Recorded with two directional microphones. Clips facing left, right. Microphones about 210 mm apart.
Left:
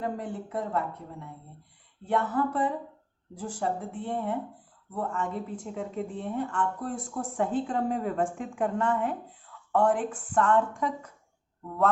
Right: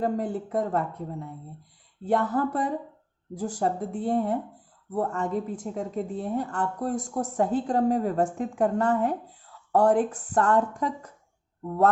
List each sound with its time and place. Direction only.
0.0 s speech: 40° right (ahead or behind)
2.0 s speech: 40° right (ahead or behind)